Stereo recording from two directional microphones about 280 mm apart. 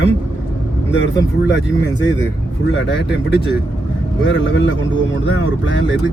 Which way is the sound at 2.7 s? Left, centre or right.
Left.